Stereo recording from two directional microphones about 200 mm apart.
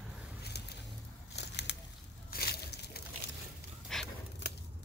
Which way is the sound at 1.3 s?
60° left (ahead or behind).